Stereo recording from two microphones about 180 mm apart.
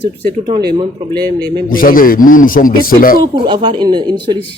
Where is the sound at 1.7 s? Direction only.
50° left (ahead or behind).